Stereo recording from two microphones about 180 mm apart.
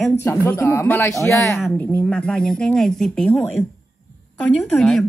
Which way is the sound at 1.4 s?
Centre (ahead or behind).